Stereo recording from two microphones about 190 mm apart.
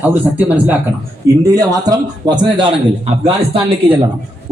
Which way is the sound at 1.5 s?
20° right (ahead or behind).